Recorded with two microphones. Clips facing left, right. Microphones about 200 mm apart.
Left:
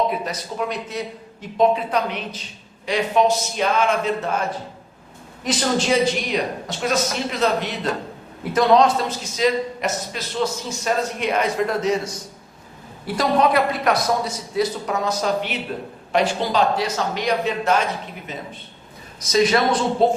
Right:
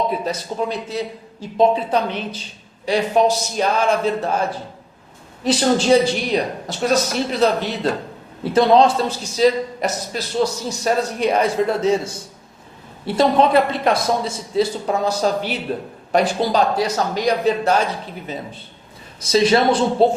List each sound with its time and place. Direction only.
0.1 s a woman's voice: 30° right (ahead or behind)
19.2 s a man's voice: 30° right (ahead or behind)